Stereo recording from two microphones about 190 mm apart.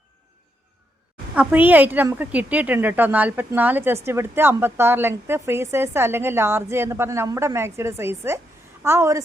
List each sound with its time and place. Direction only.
1.4 s a woman's voice: 10° right (ahead or behind)